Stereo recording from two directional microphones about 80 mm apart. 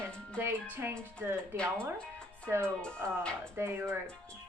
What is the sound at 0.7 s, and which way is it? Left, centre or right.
Speech, right.